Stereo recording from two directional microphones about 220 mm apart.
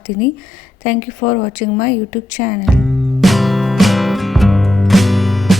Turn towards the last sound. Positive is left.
turn(degrees=0)  # may be behind; listen again after turning